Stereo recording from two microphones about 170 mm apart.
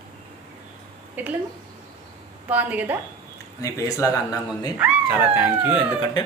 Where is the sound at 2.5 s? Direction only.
10° right (ahead or behind).